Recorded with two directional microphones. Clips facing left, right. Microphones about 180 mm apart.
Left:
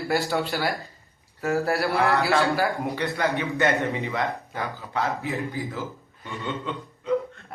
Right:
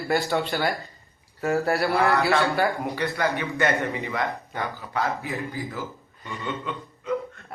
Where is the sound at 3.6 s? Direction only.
20° left (ahead or behind).